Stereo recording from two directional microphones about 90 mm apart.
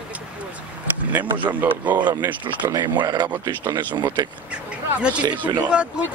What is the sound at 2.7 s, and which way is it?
Speech, 40° right (ahead or behind).